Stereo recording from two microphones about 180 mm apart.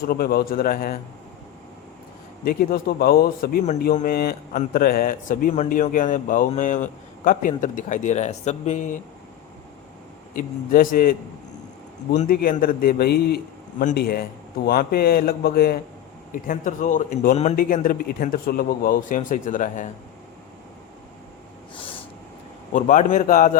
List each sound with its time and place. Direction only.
0.0 s a man's voice: 60° left (ahead or behind)
2.4 s a man's voice: 55° left (ahead or behind)
10.3 s a man's voice: 50° left (ahead or behind)
16.3 s a man's voice: 45° left (ahead or behind)
22.7 s a man's voice: 45° left (ahead or behind)